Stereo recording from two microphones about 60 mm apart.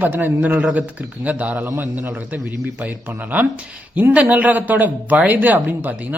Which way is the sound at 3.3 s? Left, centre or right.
Right.